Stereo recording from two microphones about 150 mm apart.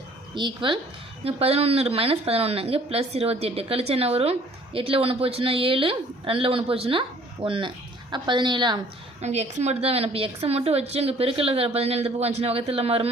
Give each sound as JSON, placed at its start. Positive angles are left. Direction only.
{"t": 0.3, "sound": "a woman's voice", "side_deg": -30}
{"t": 9.2, "sound": "a woman's voice", "side_deg": -50}